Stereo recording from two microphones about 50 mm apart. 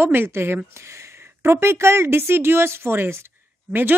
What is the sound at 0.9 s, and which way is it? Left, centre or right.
A woman's voice, right.